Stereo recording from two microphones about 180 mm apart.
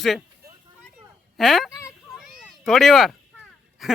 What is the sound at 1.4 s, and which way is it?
Speech, centre (ahead or behind).